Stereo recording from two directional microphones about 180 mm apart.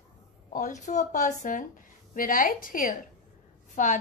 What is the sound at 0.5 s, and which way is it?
A woman's voice, 45° left (ahead or behind).